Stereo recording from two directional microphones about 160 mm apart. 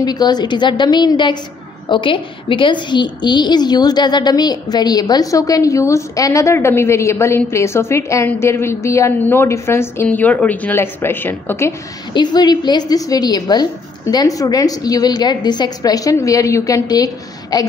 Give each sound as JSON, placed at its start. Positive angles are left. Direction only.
{"t": 0.0, "sound": "a woman's voice", "side_deg": 25}
{"t": 12.1, "sound": "a woman's voice", "side_deg": 25}